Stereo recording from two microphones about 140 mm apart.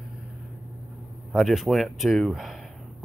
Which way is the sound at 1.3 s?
Centre (ahead or behind).